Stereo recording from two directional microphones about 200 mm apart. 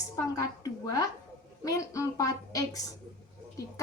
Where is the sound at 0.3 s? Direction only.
20° left (ahead or behind).